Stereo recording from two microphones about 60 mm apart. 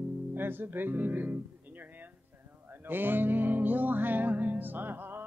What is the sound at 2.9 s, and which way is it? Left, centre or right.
Music, right.